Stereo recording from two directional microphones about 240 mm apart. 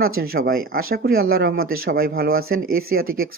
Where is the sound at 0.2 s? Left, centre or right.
Right.